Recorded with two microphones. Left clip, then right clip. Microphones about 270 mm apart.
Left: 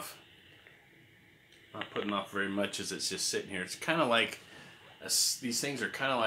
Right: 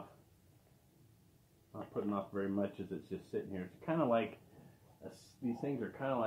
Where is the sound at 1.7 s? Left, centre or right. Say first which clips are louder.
Left 5 dB; left.